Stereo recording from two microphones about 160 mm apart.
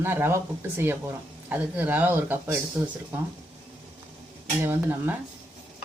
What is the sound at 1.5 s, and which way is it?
Speech, 10° right (ahead or behind).